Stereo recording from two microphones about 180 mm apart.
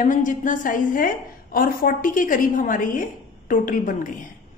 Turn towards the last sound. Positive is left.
turn(degrees=50)  # may be behind; listen again after turning